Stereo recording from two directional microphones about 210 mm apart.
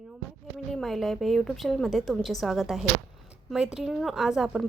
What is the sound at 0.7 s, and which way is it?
Speech, centre (ahead or behind).